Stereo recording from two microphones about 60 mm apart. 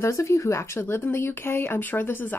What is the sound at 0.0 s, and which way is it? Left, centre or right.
Speech, left.